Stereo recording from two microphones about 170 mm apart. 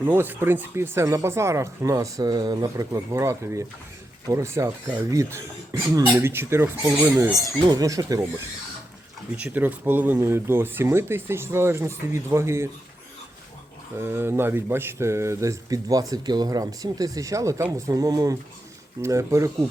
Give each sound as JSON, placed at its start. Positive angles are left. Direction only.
{"t": 0.0, "sound": "speech", "side_deg": -10}
{"t": 9.4, "sound": "speech", "side_deg": -10}
{"t": 13.9, "sound": "speech", "side_deg": -15}